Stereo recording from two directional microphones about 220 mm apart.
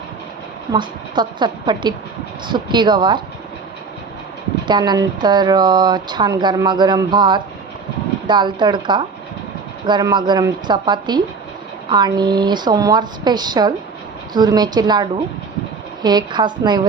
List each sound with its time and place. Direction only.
0.7 s speech: 20° right (ahead or behind)
4.6 s speech: 20° right (ahead or behind)
16.0 s speech: 20° right (ahead or behind)